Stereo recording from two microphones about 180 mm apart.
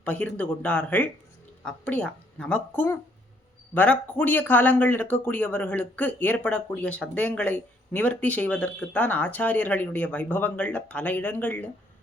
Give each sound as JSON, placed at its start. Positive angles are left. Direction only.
{"t": 0.0, "sound": "speech", "side_deg": 5}